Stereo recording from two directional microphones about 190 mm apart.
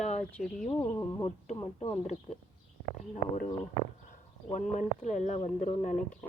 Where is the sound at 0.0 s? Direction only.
35° left (ahead or behind).